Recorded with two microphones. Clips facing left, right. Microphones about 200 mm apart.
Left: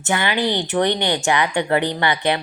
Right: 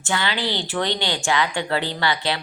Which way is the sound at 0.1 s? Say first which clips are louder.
Left 4 dB; 15° left (ahead or behind).